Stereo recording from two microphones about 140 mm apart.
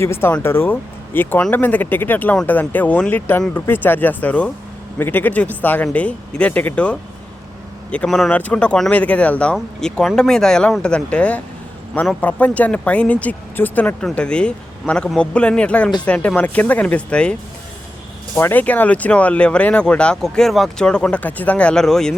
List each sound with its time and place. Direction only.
0.0 s speech: 20° left (ahead or behind)
18.3 s speech: 15° left (ahead or behind)